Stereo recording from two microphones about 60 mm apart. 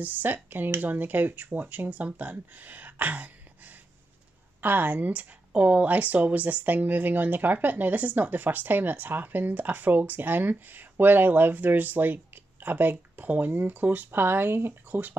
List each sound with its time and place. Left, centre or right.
0.0 s speech: right